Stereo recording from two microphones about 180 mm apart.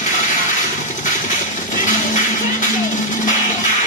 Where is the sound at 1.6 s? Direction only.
45° left (ahead or behind).